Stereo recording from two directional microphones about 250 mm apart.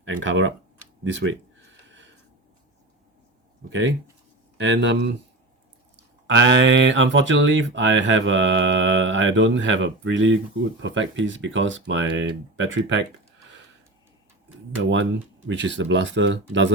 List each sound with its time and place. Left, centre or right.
0.0 s speech: right
1.1 s a sound: right
3.7 s speech: right
6.2 s speech: right
14.8 s speech: right